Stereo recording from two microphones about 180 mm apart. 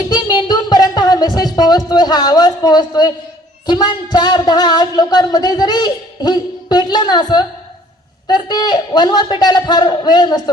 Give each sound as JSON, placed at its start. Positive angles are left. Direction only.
{"t": 0.1, "sound": "music", "side_deg": 25}
{"t": 1.5, "sound": "speech", "side_deg": 20}